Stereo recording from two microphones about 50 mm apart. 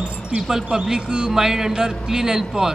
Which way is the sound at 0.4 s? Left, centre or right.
Centre.